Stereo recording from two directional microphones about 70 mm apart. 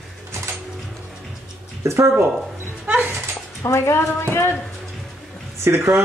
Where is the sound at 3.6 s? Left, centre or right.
Left.